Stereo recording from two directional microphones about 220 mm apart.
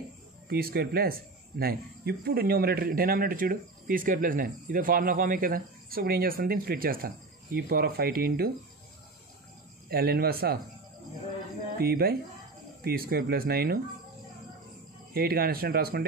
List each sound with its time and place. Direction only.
0.5 s speech: 45° right (ahead or behind)
9.8 s speech: 45° right (ahead or behind)
11.8 s speech: 45° right (ahead or behind)
15.1 s speech: 45° right (ahead or behind)